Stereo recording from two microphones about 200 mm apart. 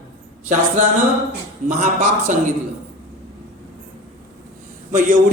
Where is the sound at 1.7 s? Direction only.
40° right (ahead or behind).